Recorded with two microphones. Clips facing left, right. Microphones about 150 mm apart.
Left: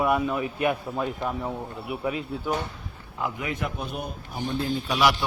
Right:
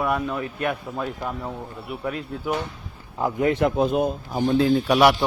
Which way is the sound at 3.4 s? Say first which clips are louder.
Right 11 dB; 65° right (ahead or behind).